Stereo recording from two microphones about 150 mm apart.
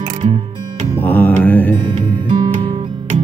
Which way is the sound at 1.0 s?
10° left (ahead or behind).